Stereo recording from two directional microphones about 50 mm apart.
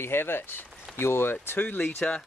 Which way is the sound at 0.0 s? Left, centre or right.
Left.